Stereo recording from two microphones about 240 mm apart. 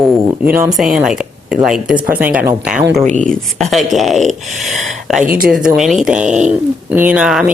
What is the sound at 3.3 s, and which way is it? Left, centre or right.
Speech, centre.